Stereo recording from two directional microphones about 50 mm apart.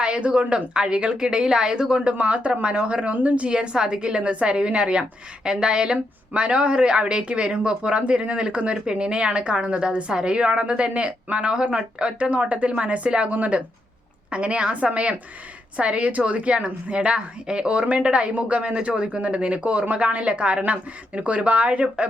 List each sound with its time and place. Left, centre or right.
0.0 s a woman's voice: right